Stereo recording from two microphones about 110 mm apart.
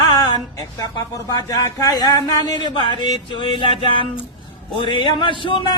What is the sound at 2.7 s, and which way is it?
A man's voice, 45° left (ahead or behind).